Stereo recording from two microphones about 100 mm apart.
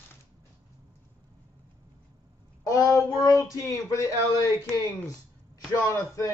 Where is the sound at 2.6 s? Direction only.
30° left (ahead or behind).